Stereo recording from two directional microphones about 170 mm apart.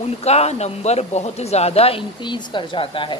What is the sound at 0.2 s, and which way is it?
A man's voice, 40° left (ahead or behind).